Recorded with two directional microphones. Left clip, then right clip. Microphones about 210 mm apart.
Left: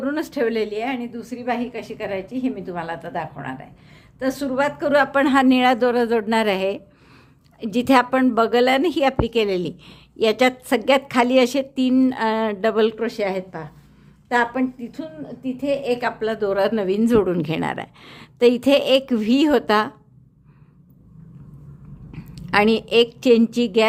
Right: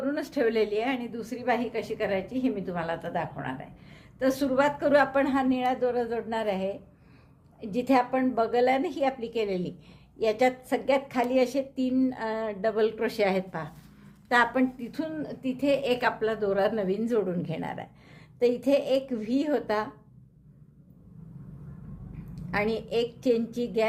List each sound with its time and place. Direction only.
0.0 s a woman's voice: 25° left (ahead or behind)
5.2 s a woman's voice: 35° left (ahead or behind)
13.0 s a woman's voice: 10° left (ahead or behind)
16.3 s a woman's voice: 25° left (ahead or behind)
22.4 s a woman's voice: 35° left (ahead or behind)